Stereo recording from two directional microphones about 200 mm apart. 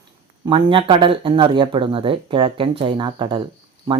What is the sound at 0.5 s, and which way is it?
Speech, 25° right (ahead or behind).